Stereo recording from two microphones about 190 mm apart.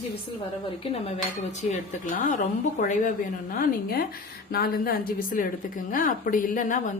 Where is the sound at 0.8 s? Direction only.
30° left (ahead or behind).